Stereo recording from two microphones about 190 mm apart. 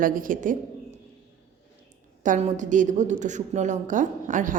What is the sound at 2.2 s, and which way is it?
A woman's voice, 40° right (ahead or behind).